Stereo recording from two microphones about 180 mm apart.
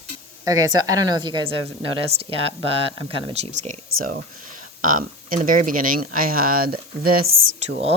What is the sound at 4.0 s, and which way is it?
Speech, 50° right (ahead or behind).